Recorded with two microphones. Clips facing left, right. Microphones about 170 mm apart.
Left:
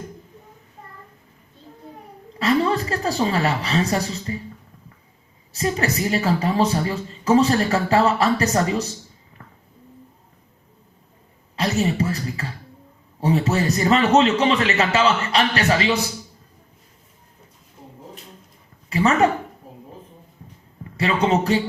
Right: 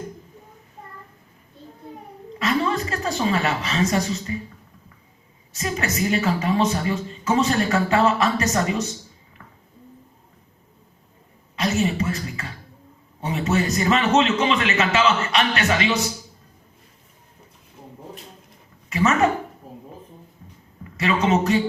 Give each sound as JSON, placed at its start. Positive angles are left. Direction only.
{"t": 2.4, "sound": "a woman's voice", "side_deg": 35}
{"t": 5.5, "sound": "speech", "side_deg": 35}
{"t": 11.5, "sound": "a sound", "side_deg": 35}
{"t": 13.1, "sound": "speech", "side_deg": 35}
{"t": 18.9, "sound": "a sound", "side_deg": 35}
{"t": 20.9, "sound": "speech", "side_deg": 30}